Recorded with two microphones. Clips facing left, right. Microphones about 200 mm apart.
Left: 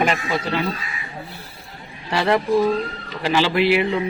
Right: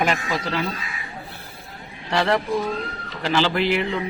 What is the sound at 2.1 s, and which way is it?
Speech, 5° left (ahead or behind).